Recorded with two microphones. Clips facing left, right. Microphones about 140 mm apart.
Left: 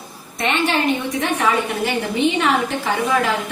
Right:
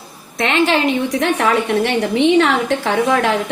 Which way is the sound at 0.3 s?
90° right.